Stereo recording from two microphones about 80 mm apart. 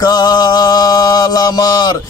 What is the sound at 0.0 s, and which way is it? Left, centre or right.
Mantra, left.